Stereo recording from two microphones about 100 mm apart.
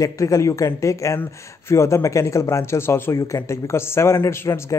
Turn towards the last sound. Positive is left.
turn(degrees=30)  # may be behind; listen again after turning